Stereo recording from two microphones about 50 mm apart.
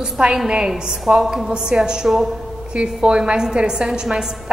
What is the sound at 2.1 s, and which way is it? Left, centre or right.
Speech, centre.